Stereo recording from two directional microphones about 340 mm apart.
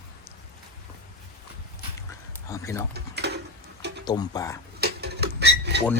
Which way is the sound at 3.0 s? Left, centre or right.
Right.